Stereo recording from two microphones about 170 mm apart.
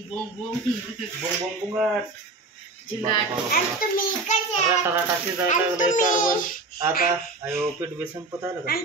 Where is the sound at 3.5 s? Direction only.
60° left (ahead or behind).